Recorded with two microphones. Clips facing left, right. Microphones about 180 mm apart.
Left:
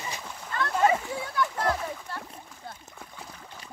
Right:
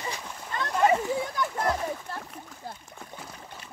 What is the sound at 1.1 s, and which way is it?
Speech, 20° right (ahead or behind).